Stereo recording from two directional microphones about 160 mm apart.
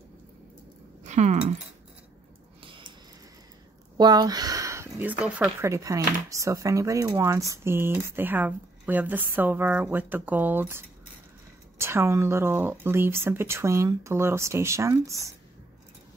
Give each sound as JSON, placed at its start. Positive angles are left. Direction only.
{"t": 1.0, "sound": "speech", "side_deg": -45}
{"t": 2.6, "sound": "a sound", "side_deg": -30}
{"t": 4.0, "sound": "speech", "side_deg": -25}
{"t": 5.6, "sound": "speech", "side_deg": -20}
{"t": 11.8, "sound": "speech", "side_deg": -15}